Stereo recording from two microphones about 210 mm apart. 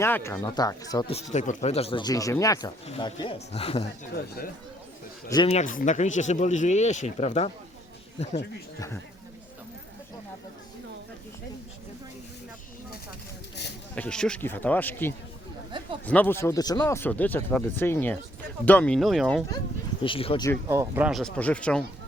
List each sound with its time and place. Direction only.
0.0 s speech: 10° left (ahead or behind); by 3.8 s 25° left (ahead or behind)
5.3 s speech: 20° left (ahead or behind)
5.5 s speech: 35° left (ahead or behind)
13.9 s speech: 5° left (ahead or behind)
20.0 s speech: 25° left (ahead or behind)
20.7 s speech: 10° right (ahead or behind); by 21.8 s 5° left (ahead or behind)